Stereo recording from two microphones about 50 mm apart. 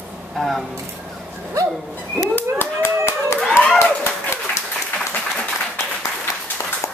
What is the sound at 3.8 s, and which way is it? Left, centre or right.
Dog, left.